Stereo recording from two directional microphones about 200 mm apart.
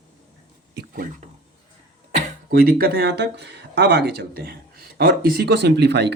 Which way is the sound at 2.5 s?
50° right (ahead or behind).